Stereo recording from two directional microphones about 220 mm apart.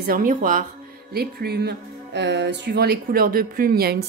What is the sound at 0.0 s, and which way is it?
A woman's voice, 40° right (ahead or behind).